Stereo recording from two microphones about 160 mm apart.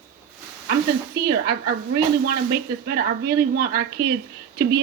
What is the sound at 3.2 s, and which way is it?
Speech, 75° right (ahead or behind).